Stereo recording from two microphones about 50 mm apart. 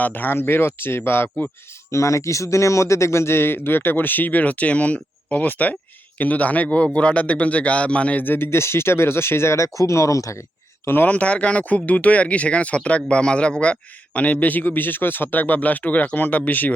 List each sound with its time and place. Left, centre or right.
0.0 s speech: left
1.9 s a man's voice: left
8.2 s speech: left
8.4 s speech: left
10.8 s speech: left
11.1 s a man's voice: left